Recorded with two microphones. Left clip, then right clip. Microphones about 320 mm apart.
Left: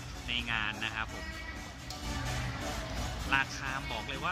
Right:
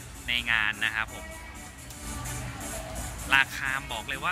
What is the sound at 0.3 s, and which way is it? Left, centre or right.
Speech, centre.